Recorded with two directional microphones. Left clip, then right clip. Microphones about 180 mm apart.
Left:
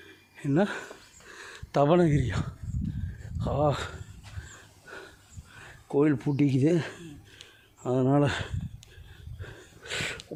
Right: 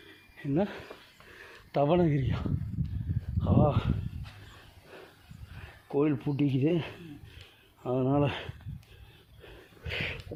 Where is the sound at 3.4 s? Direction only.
40° left (ahead or behind).